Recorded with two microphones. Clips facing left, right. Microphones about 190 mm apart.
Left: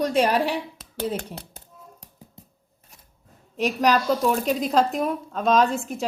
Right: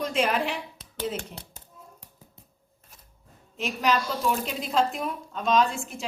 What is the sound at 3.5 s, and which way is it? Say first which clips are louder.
A woman's voice: left 5 dB; 40° left (ahead or behind).